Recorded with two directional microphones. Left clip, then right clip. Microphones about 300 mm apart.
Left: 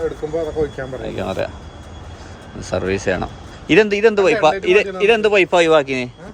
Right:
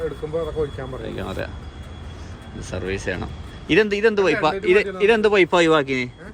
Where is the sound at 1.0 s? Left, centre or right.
Centre.